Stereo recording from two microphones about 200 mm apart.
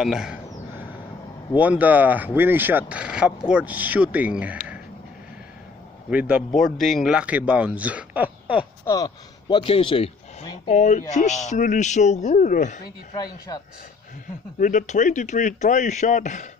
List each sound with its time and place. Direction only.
0.0 s a sound: centre (ahead or behind)
1.6 s speech: 10° right (ahead or behind)
6.0 s a man's voice: 5° right (ahead or behind)
8.8 s speech: 15° left (ahead or behind)
10.7 s speech: 35° left (ahead or behind)
13.1 s speech: 20° left (ahead or behind)
14.6 s speech: 40° left (ahead or behind)